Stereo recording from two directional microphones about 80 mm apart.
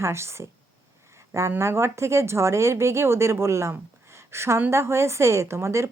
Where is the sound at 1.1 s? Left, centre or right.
Right.